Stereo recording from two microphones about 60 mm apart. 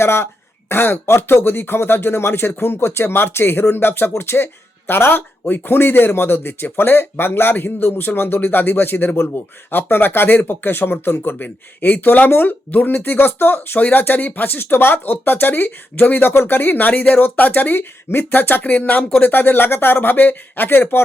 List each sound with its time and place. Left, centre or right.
0.0 s speech: left